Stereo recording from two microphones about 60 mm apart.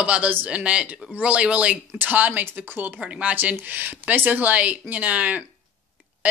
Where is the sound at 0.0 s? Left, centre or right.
Right.